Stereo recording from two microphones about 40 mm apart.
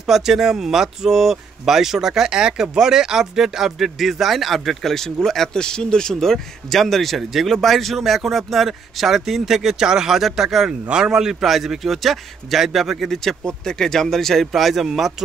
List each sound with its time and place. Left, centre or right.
0.0 s speech: centre
6.1 s speech: centre
11.4 s speech: centre
13.1 s speech: centre
14.5 s speech: centre